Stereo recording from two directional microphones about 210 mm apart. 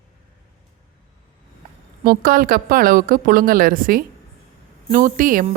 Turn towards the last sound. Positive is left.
turn(degrees=-40)  # may be behind; listen again after turning